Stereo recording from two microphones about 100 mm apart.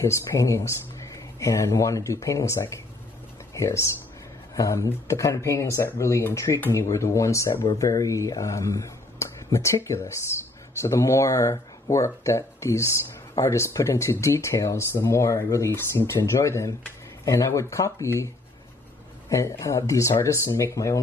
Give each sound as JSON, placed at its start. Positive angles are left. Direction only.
{"t": 0.0, "sound": "speech", "side_deg": 30}